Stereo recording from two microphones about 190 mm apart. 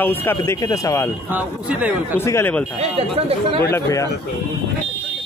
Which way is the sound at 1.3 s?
5° right (ahead or behind).